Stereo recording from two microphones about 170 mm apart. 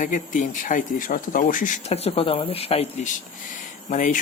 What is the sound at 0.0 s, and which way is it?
Speech, 50° left (ahead or behind).